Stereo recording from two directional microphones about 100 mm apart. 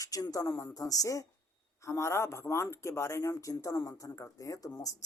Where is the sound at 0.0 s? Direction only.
35° left (ahead or behind).